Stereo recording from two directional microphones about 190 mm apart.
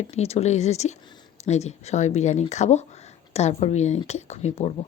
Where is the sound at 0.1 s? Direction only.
35° left (ahead or behind).